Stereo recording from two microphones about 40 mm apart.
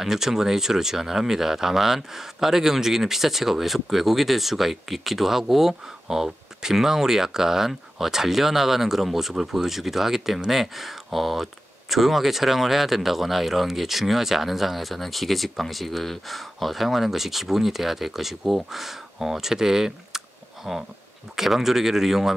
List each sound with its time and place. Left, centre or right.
0.0 s speech: centre
20.7 s speech: centre